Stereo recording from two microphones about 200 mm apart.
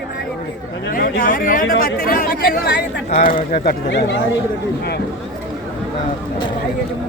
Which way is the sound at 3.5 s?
60° left (ahead or behind).